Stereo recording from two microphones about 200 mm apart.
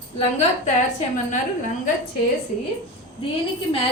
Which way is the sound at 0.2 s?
30° left (ahead or behind).